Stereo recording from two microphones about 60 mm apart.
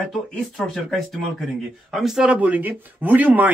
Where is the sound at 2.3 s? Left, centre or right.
Right.